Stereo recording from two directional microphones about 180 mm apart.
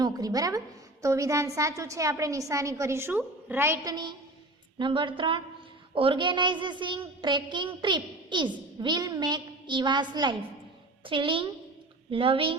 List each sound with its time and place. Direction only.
0.0 s a child's voice: 20° right (ahead or behind)